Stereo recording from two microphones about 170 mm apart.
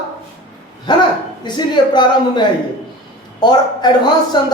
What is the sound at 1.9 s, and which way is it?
A man's voice, 25° left (ahead or behind).